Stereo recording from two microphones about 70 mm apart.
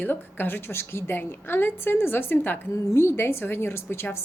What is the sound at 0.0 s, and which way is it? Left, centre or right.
A woman's voice, left.